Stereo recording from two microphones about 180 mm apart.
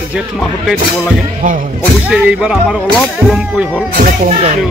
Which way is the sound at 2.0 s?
5° right (ahead or behind).